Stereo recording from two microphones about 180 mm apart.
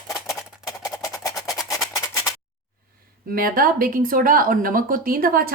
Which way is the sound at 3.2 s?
50° right (ahead or behind).